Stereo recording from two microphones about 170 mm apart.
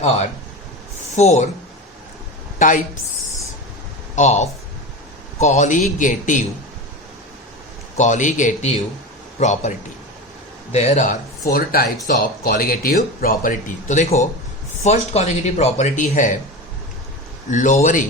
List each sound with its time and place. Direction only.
1.1 s a man's voice: 40° left (ahead or behind)
2.6 s speech: 50° left (ahead or behind)
4.1 s speech: 45° left (ahead or behind)
7.9 s a man's voice: 45° left (ahead or behind)
11.5 s speech: 60° left (ahead or behind)
17.5 s speech: 45° left (ahead or behind)